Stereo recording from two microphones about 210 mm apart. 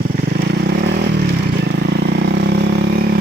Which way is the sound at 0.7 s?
55° right (ahead or behind).